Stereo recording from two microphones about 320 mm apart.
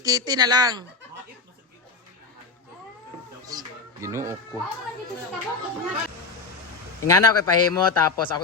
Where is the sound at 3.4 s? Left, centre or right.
Centre.